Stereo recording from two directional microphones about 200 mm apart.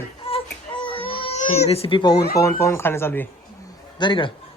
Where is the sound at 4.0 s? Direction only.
25° left (ahead or behind).